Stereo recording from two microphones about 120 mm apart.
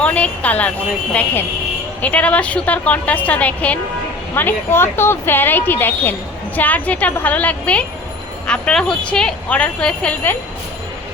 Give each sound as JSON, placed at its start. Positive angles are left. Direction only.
{"t": 0.0, "sound": "speech", "side_deg": 10}